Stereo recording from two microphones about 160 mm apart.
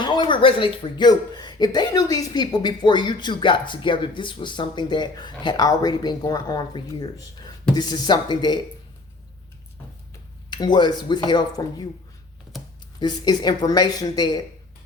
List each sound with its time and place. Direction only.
0.0 s speech: 30° left (ahead or behind)
10.5 s speech: 25° left (ahead or behind)
13.0 s speech: 25° left (ahead or behind)